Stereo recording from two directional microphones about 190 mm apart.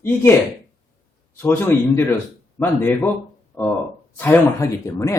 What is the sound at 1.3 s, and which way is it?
Speech, 10° left (ahead or behind).